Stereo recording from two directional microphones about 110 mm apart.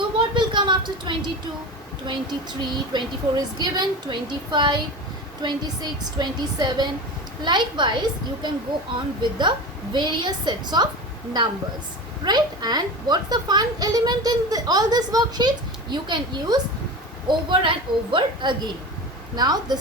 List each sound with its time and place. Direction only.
0.2 s a sound: 45° right (ahead or behind)
2.0 s a woman's voice: 45° right (ahead or behind)
12.2 s a woman's voice: 40° right (ahead or behind)